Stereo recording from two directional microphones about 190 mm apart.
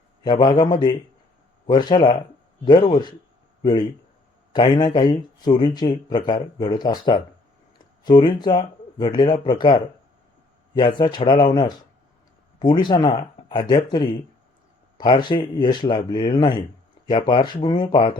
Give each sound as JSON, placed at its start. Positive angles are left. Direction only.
{"t": 0.2, "sound": "speech", "side_deg": 25}